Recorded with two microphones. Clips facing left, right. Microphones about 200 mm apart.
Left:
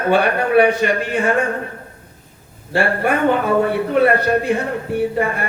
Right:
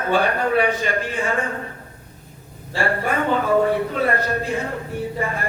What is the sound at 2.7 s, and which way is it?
A man's voice, 65° left (ahead or behind).